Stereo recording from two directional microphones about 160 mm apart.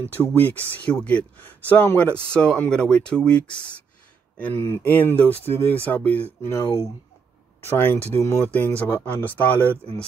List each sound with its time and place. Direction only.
0.0 s speech: 15° left (ahead or behind)